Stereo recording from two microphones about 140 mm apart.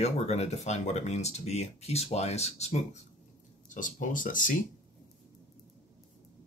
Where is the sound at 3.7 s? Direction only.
65° left (ahead or behind).